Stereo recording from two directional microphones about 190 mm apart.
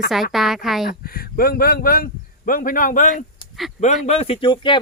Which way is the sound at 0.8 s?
50° left (ahead or behind).